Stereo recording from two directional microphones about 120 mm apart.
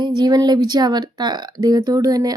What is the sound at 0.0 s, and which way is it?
Speech, 35° right (ahead or behind).